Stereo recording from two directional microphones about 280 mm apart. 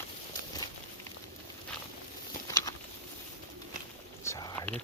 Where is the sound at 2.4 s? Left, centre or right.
Centre.